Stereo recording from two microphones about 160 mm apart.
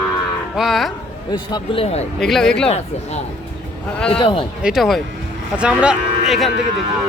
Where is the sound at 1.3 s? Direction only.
25° left (ahead or behind).